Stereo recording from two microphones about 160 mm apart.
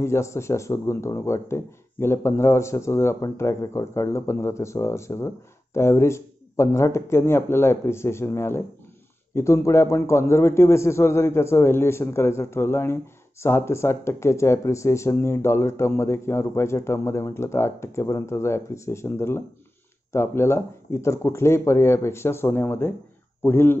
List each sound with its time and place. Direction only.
0.0 s a man's voice: 15° left (ahead or behind)